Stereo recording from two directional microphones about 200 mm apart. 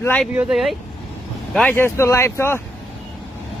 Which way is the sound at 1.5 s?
10° left (ahead or behind).